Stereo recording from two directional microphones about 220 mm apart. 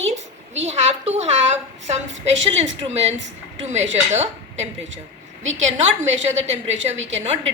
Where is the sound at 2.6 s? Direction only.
30° right (ahead or behind).